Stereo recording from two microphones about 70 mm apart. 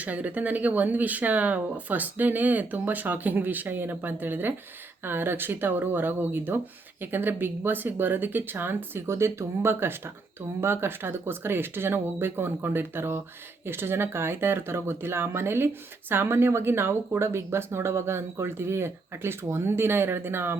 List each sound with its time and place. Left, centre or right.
0.0 s speech: right